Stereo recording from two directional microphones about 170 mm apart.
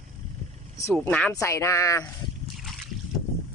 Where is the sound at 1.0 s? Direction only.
10° left (ahead or behind).